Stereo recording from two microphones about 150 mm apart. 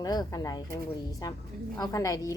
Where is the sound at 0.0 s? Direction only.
25° left (ahead or behind).